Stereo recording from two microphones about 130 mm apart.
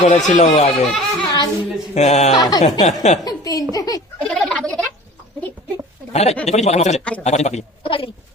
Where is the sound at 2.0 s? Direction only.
60° left (ahead or behind).